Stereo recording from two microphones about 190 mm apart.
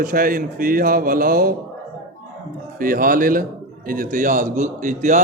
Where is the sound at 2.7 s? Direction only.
50° right (ahead or behind).